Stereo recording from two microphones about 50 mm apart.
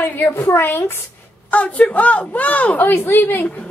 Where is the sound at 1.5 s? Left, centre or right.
Left.